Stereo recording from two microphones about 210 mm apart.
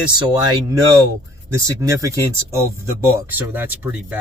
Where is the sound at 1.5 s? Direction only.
15° right (ahead or behind).